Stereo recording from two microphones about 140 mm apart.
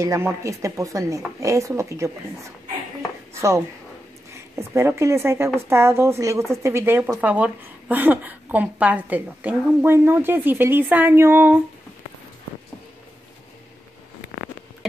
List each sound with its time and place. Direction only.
0.0 s speech: 20° right (ahead or behind)
3.3 s speech: 20° right (ahead or behind)